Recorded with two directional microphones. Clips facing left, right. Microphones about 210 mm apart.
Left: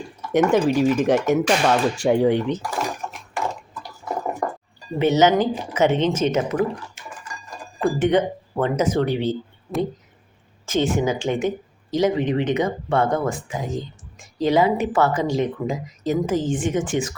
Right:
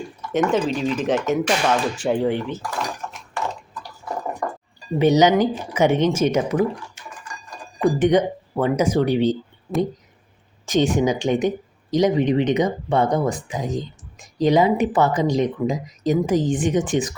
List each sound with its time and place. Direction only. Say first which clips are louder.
0.3 s speech: left 3 dB; 10° left (ahead or behind)
4.9 s a woman's voice: right 1 dB; 15° right (ahead or behind)
7.8 s speech: right 2 dB; 15° right (ahead or behind)
10.7 s a woman's voice: right 2 dB; 15° right (ahead or behind)